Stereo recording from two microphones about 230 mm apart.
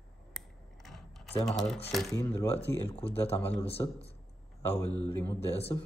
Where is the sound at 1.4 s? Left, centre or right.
Centre.